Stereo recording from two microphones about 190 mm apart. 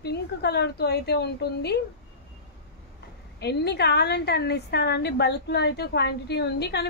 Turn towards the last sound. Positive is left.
turn(degrees=60)  # may be behind; listen again after turning